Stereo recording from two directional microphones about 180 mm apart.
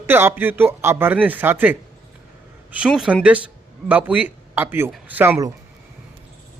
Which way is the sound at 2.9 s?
Centre (ahead or behind).